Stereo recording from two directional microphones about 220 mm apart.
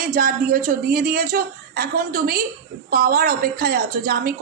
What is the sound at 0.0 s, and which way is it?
A woman's voice, 40° right (ahead or behind).